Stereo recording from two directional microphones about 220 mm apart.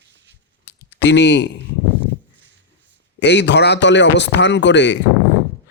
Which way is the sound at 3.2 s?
50° left (ahead or behind).